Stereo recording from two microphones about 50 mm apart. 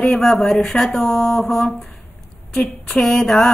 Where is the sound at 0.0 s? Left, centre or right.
Centre.